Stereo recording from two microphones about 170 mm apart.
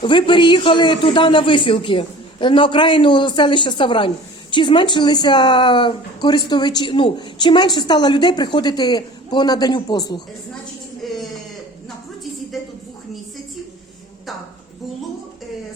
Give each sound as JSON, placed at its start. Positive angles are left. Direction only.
{"t": 0.0, "sound": "speech", "side_deg": 30}
{"t": 11.0, "sound": "speech", "side_deg": 0}
{"t": 12.5, "sound": "a woman's voice", "side_deg": 0}